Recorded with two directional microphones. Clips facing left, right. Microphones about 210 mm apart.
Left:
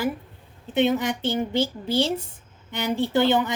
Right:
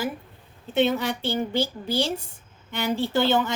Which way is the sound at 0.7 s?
15° left (ahead or behind).